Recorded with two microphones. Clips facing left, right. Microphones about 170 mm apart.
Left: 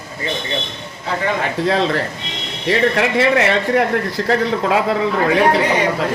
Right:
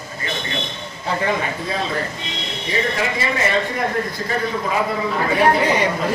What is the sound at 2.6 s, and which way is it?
A man's voice, 70° left (ahead or behind).